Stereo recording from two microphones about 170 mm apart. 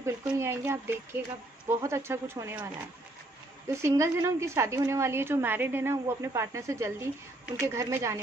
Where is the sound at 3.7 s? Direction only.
15° right (ahead or behind).